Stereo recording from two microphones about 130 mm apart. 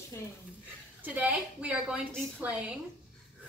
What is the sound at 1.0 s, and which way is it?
A woman's voice, 10° right (ahead or behind).